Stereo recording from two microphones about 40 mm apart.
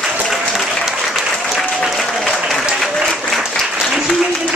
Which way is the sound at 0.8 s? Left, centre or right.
Centre.